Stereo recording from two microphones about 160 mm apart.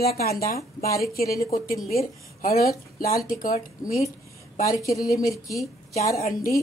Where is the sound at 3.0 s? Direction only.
60° left (ahead or behind).